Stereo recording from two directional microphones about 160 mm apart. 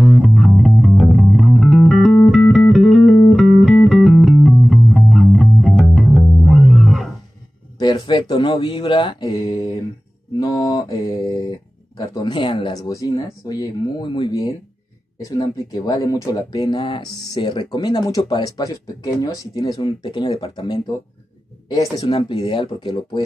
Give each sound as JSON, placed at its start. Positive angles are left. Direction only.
{"t": 0.0, "sound": "music", "side_deg": 0}
{"t": 7.8, "sound": "speech", "side_deg": 25}
{"t": 10.4, "sound": "mantra", "side_deg": 25}
{"t": 12.1, "sound": "speech", "side_deg": 30}
{"t": 22.0, "sound": "speech", "side_deg": 40}